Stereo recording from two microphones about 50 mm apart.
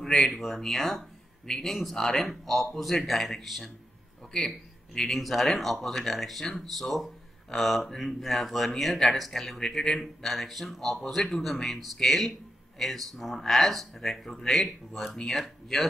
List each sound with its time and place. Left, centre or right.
0.0 s speech: centre